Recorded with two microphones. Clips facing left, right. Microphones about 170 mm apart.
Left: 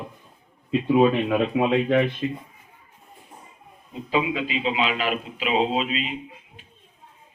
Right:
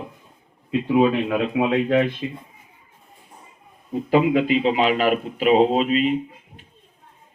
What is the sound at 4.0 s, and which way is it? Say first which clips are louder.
A man's voice: right 7 dB; 55° right (ahead or behind).